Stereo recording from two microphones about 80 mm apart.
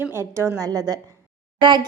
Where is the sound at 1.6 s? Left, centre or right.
Right.